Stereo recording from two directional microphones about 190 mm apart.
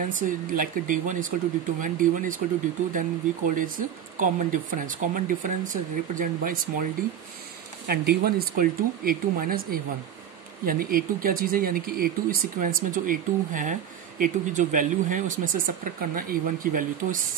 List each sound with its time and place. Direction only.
0.1 s speech: 45° right (ahead or behind)
7.8 s speech: 55° right (ahead or behind)